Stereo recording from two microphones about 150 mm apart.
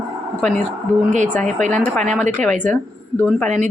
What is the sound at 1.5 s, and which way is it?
Speech, 55° right (ahead or behind).